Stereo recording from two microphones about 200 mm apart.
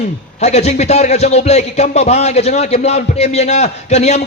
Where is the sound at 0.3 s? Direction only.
35° left (ahead or behind).